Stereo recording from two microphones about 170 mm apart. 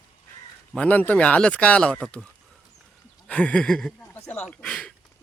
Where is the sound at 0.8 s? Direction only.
10° left (ahead or behind).